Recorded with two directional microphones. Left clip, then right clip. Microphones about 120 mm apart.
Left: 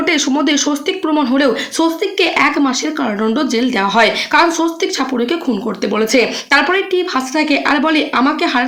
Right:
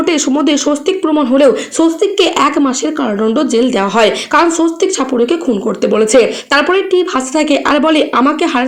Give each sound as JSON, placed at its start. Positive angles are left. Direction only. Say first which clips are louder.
{"t": 0.0, "sound": "speech", "louder": "right 2 dB", "side_deg": -15}
{"t": 3.2, "sound": "speech", "louder": "right 5 dB", "side_deg": 0}
{"t": 3.4, "sound": "speech", "louder": "right 3 dB", "side_deg": -20}